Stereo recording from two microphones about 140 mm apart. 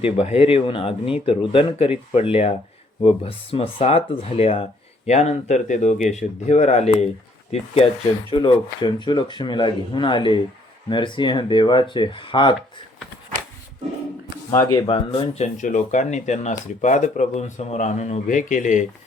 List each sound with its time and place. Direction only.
0.0 s speech: 45° left (ahead or behind)
8.3 s speech: 35° left (ahead or behind)
14.5 s speech: 25° left (ahead or behind)
14.8 s speech: 40° left (ahead or behind)
15.5 s speech: 60° left (ahead or behind)